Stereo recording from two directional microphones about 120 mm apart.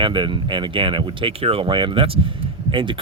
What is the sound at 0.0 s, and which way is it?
Speech, 40° right (ahead or behind).